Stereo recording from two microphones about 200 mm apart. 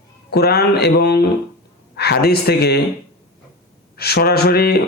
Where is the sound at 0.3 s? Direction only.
55° left (ahead or behind).